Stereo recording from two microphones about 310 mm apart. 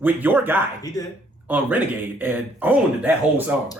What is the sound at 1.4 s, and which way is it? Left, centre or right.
Speech, centre.